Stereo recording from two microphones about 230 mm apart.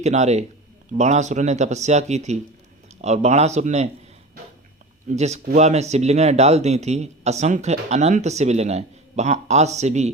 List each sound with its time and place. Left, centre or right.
0.0 s speech: right
5.0 s speech: right